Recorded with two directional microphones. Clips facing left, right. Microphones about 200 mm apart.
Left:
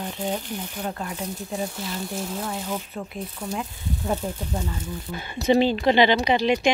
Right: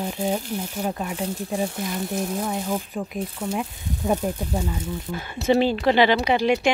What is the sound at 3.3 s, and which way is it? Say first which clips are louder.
Speech: right 2 dB; 25° right (ahead or behind).